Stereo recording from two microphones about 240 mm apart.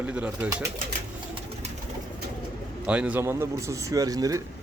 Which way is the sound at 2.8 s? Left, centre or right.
Centre.